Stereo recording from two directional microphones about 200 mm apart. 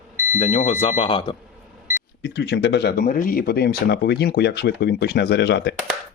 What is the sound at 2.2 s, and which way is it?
Speech, 60° left (ahead or behind).